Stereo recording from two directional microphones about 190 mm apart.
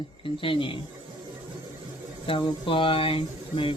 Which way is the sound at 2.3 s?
25° left (ahead or behind).